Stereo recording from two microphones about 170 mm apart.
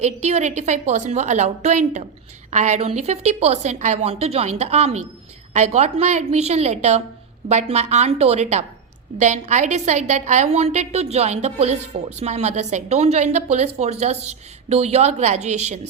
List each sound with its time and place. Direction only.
0.0 s a woman's voice: 40° right (ahead or behind)